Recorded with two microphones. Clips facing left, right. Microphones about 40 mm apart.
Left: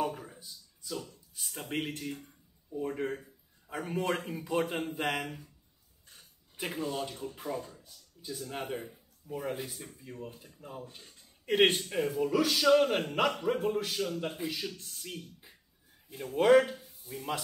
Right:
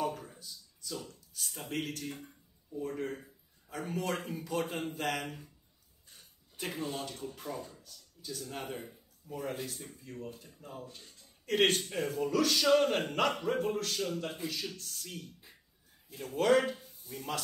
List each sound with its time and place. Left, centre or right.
0.0 s a sound: centre
1.4 s speech: centre
1.7 s speech: left
6.5 s speech: centre
11.9 s speech: centre